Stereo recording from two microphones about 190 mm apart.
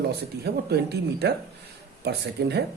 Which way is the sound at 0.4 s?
60° right (ahead or behind).